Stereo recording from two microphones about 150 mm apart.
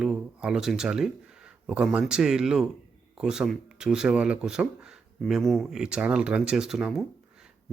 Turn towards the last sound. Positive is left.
turn(degrees=0)  # may be behind; listen again after turning